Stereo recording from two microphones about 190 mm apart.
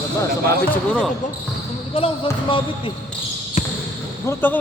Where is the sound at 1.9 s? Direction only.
30° left (ahead or behind).